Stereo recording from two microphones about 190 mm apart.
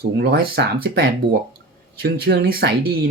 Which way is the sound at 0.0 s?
55° right (ahead or behind).